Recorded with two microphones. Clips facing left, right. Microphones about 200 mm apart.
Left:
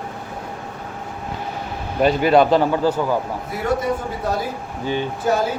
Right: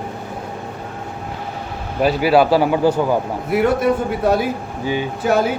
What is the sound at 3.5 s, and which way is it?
Speech, 70° right (ahead or behind).